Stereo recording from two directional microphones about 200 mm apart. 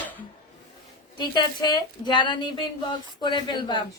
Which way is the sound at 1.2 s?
20° left (ahead or behind).